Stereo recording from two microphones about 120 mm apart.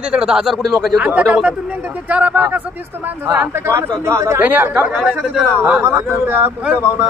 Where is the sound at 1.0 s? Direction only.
10° right (ahead or behind).